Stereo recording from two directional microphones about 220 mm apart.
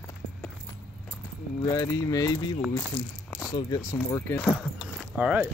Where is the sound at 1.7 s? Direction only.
15° left (ahead or behind).